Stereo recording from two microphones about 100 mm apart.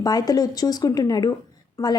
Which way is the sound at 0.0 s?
40° left (ahead or behind).